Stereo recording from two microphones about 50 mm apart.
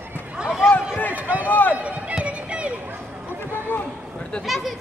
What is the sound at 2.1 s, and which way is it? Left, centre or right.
Run, right.